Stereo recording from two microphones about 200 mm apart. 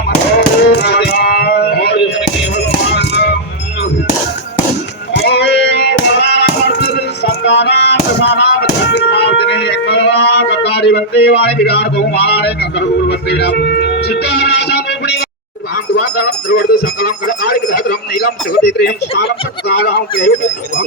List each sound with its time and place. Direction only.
0.3 s chop: 55° left (ahead or behind)
5.1 s hands: 55° left (ahead or behind)
9.5 s music: 55° left (ahead or behind)
16.2 s speech: 55° left (ahead or behind)